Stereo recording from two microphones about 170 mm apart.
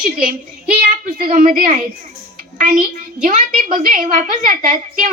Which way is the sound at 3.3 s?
50° right (ahead or behind).